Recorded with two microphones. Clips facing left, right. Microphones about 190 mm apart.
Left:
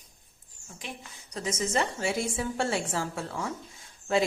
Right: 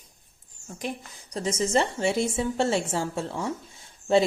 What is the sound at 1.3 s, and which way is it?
A woman's voice, 30° right (ahead or behind).